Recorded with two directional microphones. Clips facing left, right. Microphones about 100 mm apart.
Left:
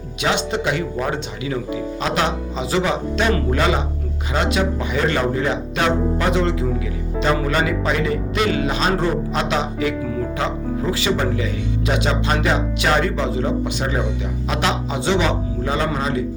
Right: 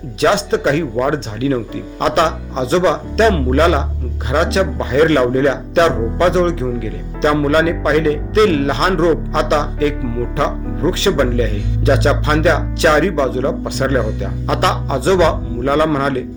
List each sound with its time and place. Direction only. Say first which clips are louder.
0.2 s a man's voice: right 7 dB; 35° right (ahead or behind)